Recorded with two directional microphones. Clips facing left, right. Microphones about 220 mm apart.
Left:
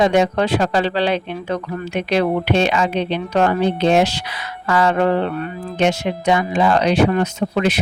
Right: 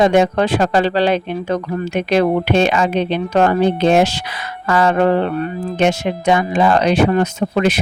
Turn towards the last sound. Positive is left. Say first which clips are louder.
# right 2 dB
turn(degrees=-45)  # may be behind; listen again after turning